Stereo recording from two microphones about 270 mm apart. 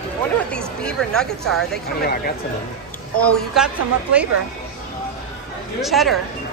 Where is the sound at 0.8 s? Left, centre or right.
Centre.